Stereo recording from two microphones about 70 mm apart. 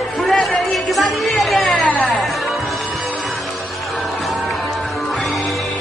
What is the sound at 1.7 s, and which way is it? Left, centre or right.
Music, centre.